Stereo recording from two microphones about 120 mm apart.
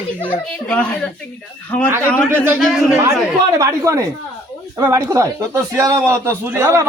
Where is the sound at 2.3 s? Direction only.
15° right (ahead or behind).